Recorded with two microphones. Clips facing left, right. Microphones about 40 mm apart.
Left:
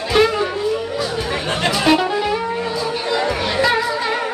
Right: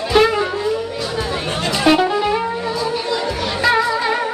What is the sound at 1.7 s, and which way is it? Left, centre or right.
Music, centre.